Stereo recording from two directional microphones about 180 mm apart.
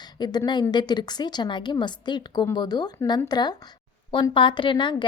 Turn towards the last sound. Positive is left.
turn(degrees=25)  # may be behind; listen again after turning